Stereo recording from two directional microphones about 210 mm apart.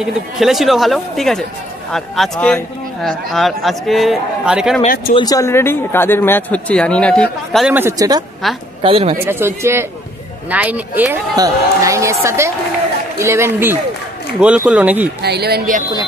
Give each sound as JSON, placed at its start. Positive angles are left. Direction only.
{"t": 0.0, "sound": "speech", "side_deg": 0}
{"t": 4.8, "sound": "speech", "side_deg": 45}
{"t": 5.1, "sound": "speech", "side_deg": 15}
{"t": 8.4, "sound": "speech", "side_deg": 0}
{"t": 8.8, "sound": "speech", "side_deg": -25}
{"t": 9.2, "sound": "speech", "side_deg": -10}
{"t": 15.2, "sound": "speech", "side_deg": -50}